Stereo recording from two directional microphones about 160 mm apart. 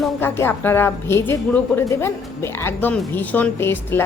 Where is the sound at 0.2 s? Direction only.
15° left (ahead or behind).